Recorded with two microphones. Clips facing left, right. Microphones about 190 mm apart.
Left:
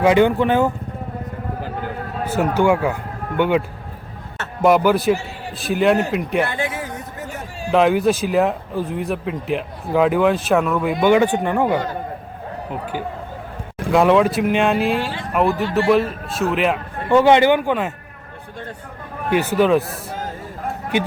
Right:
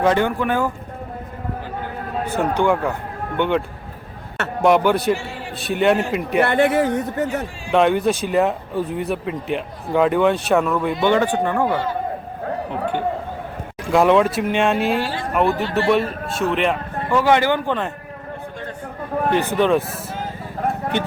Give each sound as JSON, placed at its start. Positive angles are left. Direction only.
{"t": 0.0, "sound": "speech", "side_deg": 15}
{"t": 2.3, "sound": "speech", "side_deg": 5}
{"t": 4.6, "sound": "speech", "side_deg": 0}
{"t": 6.4, "sound": "speech", "side_deg": -65}
{"t": 7.7, "sound": "speech", "side_deg": 0}
{"t": 11.0, "sound": "speech", "side_deg": 15}
{"t": 13.9, "sound": "speech", "side_deg": 0}
{"t": 17.1, "sound": "speech", "side_deg": 25}
{"t": 19.3, "sound": "speech", "side_deg": 5}